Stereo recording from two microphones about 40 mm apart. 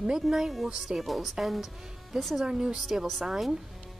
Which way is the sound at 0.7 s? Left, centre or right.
Centre.